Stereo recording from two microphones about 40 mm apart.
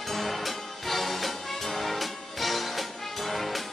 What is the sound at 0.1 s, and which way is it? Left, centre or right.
Music, centre.